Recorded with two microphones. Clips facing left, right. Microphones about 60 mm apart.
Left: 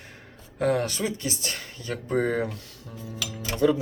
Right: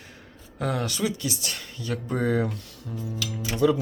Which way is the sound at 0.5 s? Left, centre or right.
Left.